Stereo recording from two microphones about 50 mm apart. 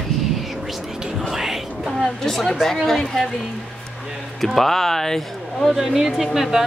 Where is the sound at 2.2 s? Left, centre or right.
Centre.